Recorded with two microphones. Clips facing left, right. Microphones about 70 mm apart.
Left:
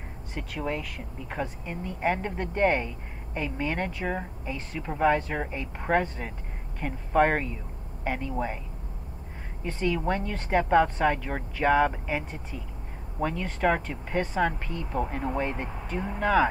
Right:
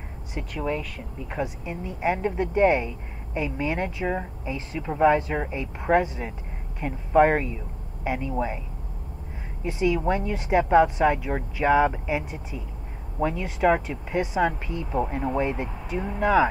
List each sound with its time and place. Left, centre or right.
0.6 s speech: centre
1.4 s speech: centre
9.7 s speech: centre